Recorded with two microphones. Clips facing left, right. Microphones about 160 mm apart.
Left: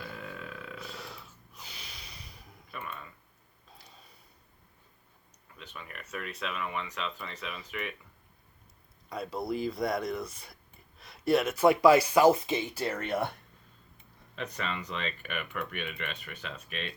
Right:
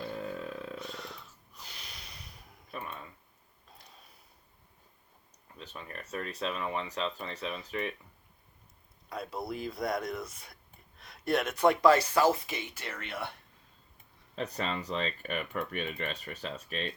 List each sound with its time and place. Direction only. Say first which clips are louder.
0.0 s burping: right 5 dB; 35° right (ahead or behind)
0.8 s snort: right 1 dB; 5° left (ahead or behind)
2.7 s a sound: right 1 dB; 35° right (ahead or behind)
3.7 s a sound: left 1 dB; centre (ahead or behind)
5.5 s speech: right 2 dB; 35° right (ahead or behind)
9.0 s speech: left 3 dB; centre (ahead or behind); by 13.3 s 45° left (ahead or behind)
14.3 s speech: right 2 dB; 35° right (ahead or behind)